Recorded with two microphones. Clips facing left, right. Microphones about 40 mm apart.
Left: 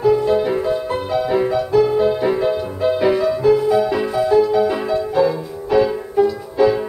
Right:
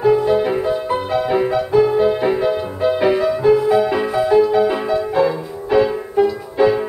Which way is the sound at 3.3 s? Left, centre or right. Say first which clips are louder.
Right 1 dB; right.